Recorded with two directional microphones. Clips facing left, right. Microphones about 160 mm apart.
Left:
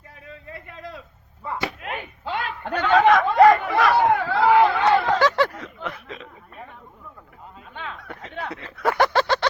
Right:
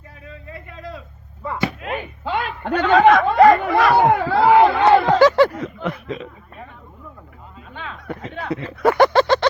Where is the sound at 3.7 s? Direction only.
50° right (ahead or behind).